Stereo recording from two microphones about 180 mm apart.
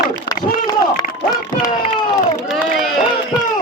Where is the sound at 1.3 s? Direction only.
25° left (ahead or behind).